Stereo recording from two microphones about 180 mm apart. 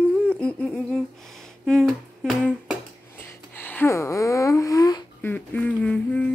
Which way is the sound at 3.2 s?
10° left (ahead or behind).